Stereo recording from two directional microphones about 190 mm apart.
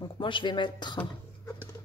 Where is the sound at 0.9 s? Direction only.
10° left (ahead or behind).